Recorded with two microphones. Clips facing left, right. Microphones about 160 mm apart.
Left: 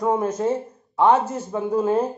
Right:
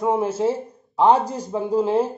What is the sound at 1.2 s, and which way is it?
Speech, 35° right (ahead or behind).